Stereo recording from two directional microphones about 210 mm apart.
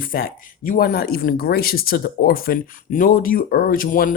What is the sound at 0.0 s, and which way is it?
Speech, 45° left (ahead or behind).